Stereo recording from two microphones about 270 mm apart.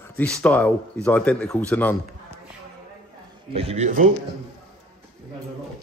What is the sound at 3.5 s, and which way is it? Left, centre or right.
Speech, right.